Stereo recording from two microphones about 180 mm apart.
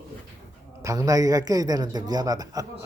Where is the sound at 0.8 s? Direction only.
20° right (ahead or behind).